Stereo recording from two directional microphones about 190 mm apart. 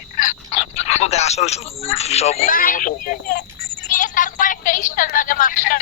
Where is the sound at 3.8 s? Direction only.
45° left (ahead or behind).